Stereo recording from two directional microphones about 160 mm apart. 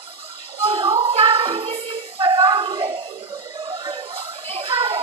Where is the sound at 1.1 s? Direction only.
35° right (ahead or behind).